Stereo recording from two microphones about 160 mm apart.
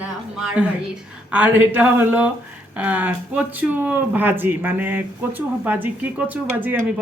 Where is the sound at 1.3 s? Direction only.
10° right (ahead or behind).